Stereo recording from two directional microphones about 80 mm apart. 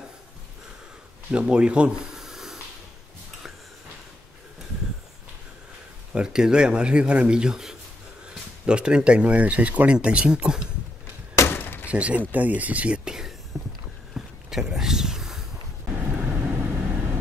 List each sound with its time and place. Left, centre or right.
1.3 s speech: centre
6.1 s speech: centre
11.3 s a sound: left
11.9 s speech: centre
14.1 s a sound: centre
15.9 s vehicle: right